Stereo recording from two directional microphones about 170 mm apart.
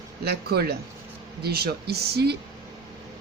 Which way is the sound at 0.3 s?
70° right (ahead or behind).